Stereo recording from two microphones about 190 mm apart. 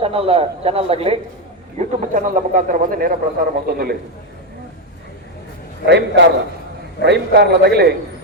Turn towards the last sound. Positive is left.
turn(degrees=-60)  # may be behind; listen again after turning